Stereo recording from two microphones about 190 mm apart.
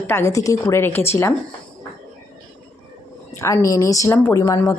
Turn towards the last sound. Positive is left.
turn(degrees=15)  # may be behind; listen again after turning